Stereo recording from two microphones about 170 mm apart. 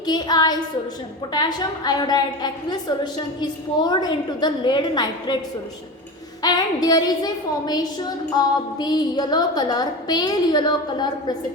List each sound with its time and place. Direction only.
0.0 s a woman's voice: 25° left (ahead or behind)
6.4 s a woman's voice: 25° left (ahead or behind)